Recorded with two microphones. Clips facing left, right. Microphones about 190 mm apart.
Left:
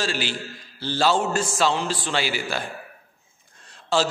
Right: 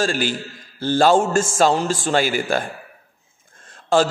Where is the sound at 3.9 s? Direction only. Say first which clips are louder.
Right 6 dB; 50° right (ahead or behind).